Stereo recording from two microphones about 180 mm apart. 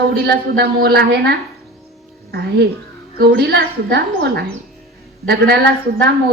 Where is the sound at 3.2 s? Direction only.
65° right (ahead or behind).